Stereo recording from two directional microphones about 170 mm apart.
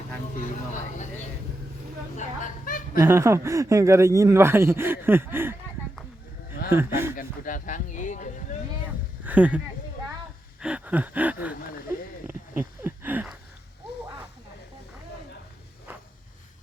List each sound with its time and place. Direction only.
2.1 s speech: 50° left (ahead or behind)
3.0 s speech: 15° right (ahead or behind)
6.7 s speech: 15° right (ahead or behind)
7.2 s speech: 50° left (ahead or behind)
9.2 s speech: 10° right (ahead or behind)
10.6 s speech: 5° right (ahead or behind)
12.3 s a sound: 10° right (ahead or behind)
15.9 s a sound: 10° right (ahead or behind)